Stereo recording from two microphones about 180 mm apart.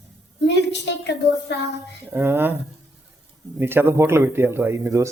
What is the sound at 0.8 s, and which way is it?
Child singing, 75° left (ahead or behind).